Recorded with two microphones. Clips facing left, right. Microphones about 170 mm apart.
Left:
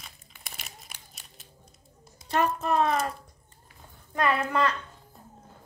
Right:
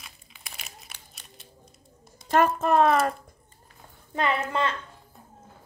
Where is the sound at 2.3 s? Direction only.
50° right (ahead or behind).